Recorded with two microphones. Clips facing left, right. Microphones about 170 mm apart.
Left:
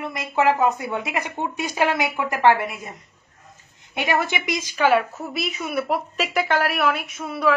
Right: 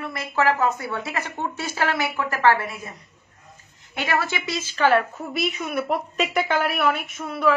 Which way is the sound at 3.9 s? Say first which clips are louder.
Left 2 dB; 20° left (ahead or behind).